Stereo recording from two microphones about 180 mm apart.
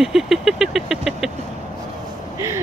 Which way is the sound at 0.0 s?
Centre (ahead or behind).